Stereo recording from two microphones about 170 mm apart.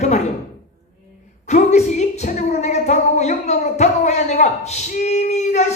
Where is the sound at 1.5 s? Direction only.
45° left (ahead or behind).